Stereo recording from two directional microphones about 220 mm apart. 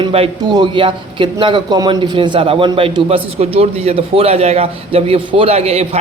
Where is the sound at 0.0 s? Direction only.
25° right (ahead or behind).